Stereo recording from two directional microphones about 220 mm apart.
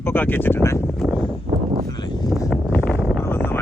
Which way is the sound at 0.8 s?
Centre (ahead or behind).